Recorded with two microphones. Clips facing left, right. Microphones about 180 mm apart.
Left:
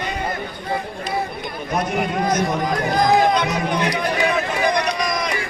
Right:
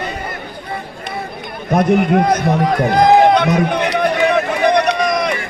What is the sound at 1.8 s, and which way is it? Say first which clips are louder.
Run: right 9 dB; 60° right (ahead or behind).